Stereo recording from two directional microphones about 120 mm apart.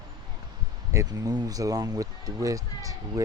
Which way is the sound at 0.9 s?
30° right (ahead or behind).